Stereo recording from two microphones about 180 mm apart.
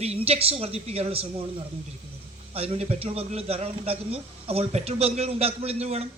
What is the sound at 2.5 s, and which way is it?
A man's voice, 35° right (ahead or behind).